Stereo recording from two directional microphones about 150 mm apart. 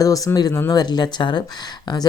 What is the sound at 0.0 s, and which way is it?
Speech, 25° left (ahead or behind).